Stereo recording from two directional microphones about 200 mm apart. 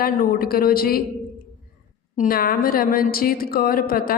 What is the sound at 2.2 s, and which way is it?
Speech, 45° left (ahead or behind).